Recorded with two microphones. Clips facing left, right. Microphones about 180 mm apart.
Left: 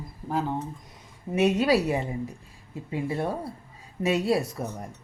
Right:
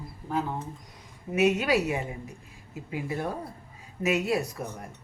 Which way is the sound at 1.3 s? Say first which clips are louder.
Left 2 dB; 30° left (ahead or behind).